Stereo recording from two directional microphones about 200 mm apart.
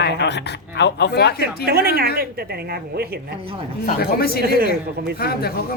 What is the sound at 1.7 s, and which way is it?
A woman's voice, 50° right (ahead or behind).